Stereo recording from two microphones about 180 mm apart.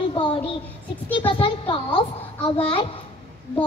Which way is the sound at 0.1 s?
25° left (ahead or behind).